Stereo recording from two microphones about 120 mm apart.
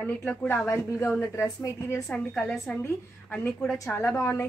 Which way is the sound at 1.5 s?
30° left (ahead or behind).